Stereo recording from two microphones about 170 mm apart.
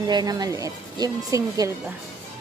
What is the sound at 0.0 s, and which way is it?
Speech, 25° right (ahead or behind).